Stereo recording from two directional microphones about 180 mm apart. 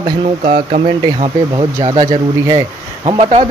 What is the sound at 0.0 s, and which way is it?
Speech, 25° right (ahead or behind).